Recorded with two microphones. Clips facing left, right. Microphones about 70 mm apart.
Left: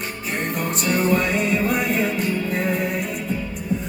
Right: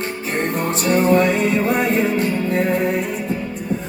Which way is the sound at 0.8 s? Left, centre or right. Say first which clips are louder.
Right 5 dB; right.